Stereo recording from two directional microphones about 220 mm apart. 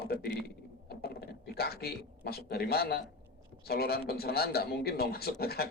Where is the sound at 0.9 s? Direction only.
45° left (ahead or behind).